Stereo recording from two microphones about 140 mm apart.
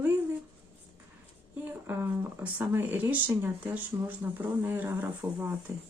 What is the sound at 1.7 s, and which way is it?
Speech, 15° right (ahead or behind).